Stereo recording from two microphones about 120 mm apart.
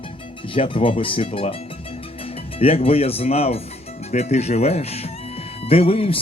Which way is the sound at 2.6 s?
55° left (ahead or behind).